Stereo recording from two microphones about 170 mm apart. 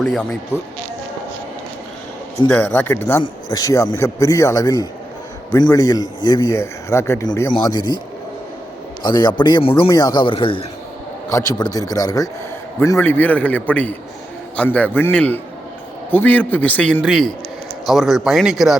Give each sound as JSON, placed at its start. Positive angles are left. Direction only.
{"t": 0.0, "sound": "speech", "side_deg": 5}
{"t": 2.5, "sound": "speech", "side_deg": 10}
{"t": 9.0, "sound": "speech", "side_deg": 25}
{"t": 11.3, "sound": "a man's voice", "side_deg": 20}